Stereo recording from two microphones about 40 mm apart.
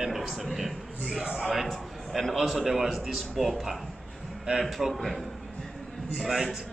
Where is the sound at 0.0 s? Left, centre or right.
Centre.